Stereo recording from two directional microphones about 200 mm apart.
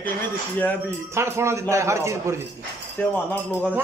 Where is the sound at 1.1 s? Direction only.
15° right (ahead or behind).